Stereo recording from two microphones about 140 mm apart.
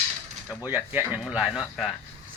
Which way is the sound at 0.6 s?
15° right (ahead or behind).